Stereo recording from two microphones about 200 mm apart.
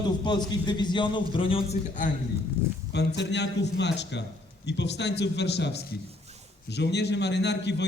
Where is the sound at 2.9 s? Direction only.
60° left (ahead or behind).